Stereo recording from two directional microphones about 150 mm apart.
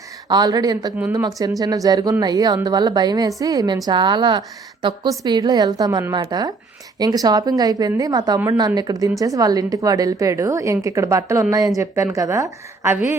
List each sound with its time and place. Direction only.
0.3 s a woman's voice: 25° right (ahead or behind)